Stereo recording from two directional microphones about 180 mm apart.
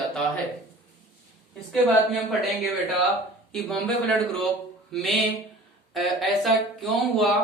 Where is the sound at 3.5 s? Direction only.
5° left (ahead or behind).